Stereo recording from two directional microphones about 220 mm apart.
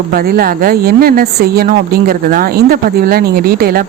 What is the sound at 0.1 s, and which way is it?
Speech, 40° right (ahead or behind).